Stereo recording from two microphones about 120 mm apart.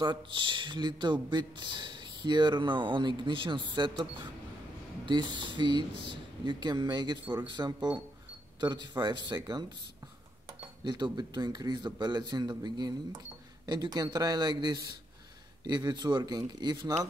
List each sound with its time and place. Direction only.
0.0 s speech: 40° right (ahead or behind)
5.0 s speech: 40° right (ahead or behind)
10.8 s speech: 40° right (ahead or behind)